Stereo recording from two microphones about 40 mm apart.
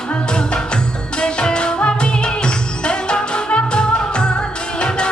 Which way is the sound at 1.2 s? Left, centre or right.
Left.